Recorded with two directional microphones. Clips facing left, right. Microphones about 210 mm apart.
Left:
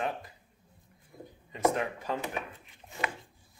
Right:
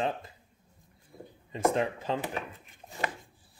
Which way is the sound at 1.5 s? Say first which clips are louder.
Right 1 dB; 30° right (ahead or behind).